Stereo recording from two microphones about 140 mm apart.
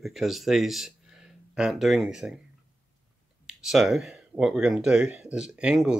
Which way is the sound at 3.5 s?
5° right (ahead or behind).